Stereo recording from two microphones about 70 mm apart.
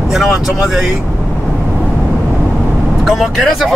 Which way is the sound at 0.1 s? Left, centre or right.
Centre.